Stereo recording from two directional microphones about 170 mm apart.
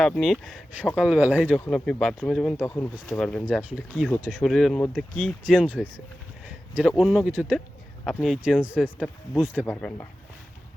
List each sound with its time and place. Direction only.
0.0 s speech: centre (ahead or behind)
1.4 s speech: 10° left (ahead or behind)
2.6 s speech: 15° left (ahead or behind)
3.4 s speech: 10° right (ahead or behind)
3.9 s speech: 5° left (ahead or behind)
5.5 s speech: 10° right (ahead or behind)
9.6 s speech: 15° left (ahead or behind)